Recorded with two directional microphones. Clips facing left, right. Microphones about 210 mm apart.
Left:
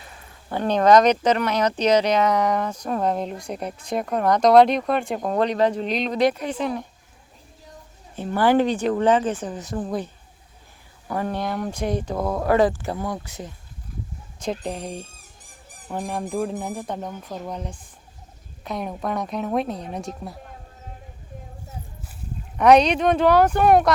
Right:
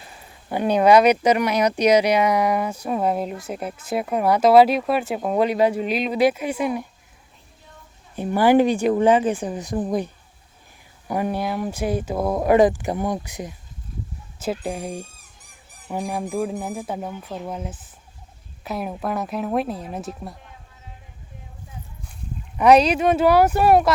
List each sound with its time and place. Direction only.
0.5 s speech: 10° right (ahead or behind)
8.1 s speech: 15° right (ahead or behind)
11.1 s speech: 10° right (ahead or behind)
20.4 s a sound: 45° left (ahead or behind)
22.5 s speech: 5° right (ahead or behind)